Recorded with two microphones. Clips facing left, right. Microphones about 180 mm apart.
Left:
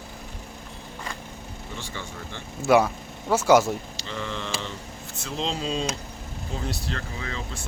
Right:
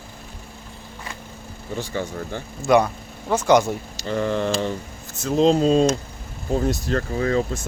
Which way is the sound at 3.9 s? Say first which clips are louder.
Right 10 dB; 45° right (ahead or behind).